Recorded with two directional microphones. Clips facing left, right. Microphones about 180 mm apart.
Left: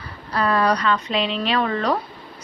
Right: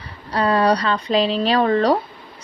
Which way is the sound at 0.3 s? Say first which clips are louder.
Right 3 dB; 30° right (ahead or behind).